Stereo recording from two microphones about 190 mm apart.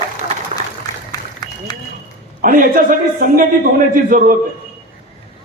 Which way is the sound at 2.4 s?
45° right (ahead or behind).